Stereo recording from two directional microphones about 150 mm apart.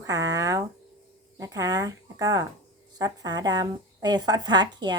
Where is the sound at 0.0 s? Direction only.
25° right (ahead or behind).